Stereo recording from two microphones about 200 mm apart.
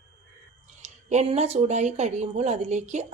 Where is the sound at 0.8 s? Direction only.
35° right (ahead or behind).